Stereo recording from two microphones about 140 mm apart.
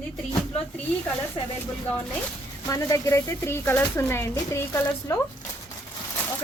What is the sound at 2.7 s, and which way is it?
Speech, 20° left (ahead or behind).